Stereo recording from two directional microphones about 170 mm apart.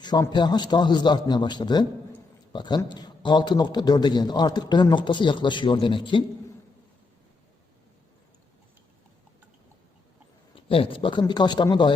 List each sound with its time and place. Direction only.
0.0 s a man's voice: 25° left (ahead or behind)
10.5 s a man's voice: 30° left (ahead or behind)